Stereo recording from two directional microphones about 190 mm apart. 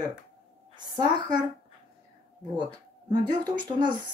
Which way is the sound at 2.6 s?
25° right (ahead or behind).